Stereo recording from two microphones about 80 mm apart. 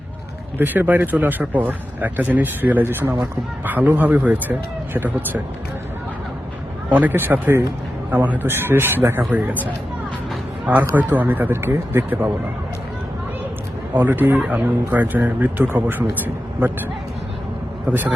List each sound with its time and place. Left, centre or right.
0.6 s speech: right
6.9 s speech: right
10.7 s speech: right
13.9 s speech: right